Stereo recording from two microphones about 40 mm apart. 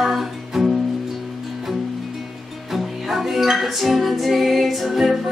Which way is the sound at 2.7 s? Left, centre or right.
Centre.